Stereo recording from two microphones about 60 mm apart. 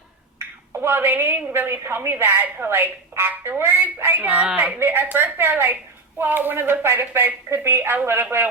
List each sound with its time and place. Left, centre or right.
0.4 s finger snapping: right
0.8 s speech: right